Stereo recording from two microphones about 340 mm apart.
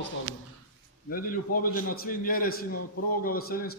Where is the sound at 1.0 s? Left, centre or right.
Left.